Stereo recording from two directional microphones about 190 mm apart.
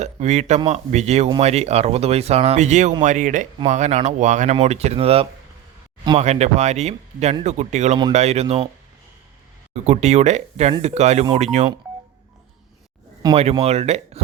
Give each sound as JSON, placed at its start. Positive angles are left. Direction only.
{"t": 0.0, "sound": "speech", "side_deg": -35}
{"t": 9.7, "sound": "speech", "side_deg": -35}
{"t": 13.3, "sound": "speech", "side_deg": -30}